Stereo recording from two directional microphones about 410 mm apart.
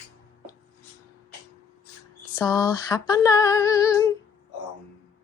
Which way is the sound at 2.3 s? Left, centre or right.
Centre.